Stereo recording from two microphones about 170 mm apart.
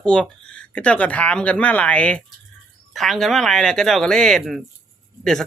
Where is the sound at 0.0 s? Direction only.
5° left (ahead or behind).